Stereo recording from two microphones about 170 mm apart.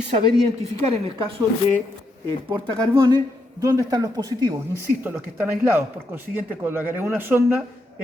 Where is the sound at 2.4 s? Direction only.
30° right (ahead or behind).